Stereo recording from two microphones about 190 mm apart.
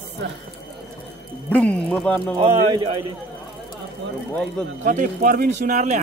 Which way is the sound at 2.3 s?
25° right (ahead or behind).